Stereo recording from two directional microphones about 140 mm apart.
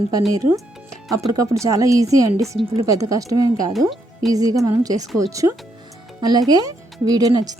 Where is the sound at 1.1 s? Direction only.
25° right (ahead or behind).